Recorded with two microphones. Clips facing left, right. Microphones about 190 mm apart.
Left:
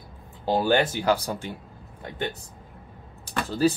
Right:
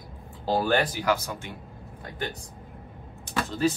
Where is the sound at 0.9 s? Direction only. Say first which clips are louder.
Left 3 dB; 30° left (ahead or behind).